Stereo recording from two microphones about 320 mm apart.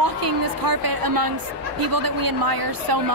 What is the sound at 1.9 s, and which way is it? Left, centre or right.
Speech, right.